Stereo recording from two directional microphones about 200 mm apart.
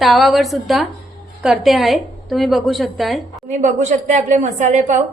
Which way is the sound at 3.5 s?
35° right (ahead or behind).